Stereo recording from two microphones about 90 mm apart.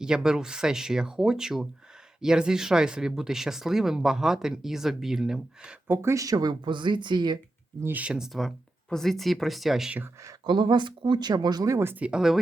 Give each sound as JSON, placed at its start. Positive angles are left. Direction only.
{"t": 0.0, "sound": "speech", "side_deg": -10}
{"t": 5.9, "sound": "speech", "side_deg": -30}
{"t": 7.8, "sound": "speech", "side_deg": -20}
{"t": 10.4, "sound": "speech", "side_deg": -55}
{"t": 11.9, "sound": "speech", "side_deg": -10}